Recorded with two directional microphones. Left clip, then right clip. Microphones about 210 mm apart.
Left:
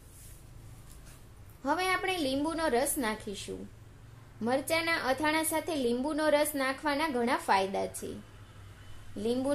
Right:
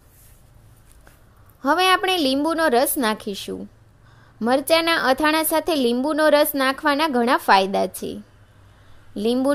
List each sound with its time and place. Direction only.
1.6 s a woman's voice: 40° right (ahead or behind)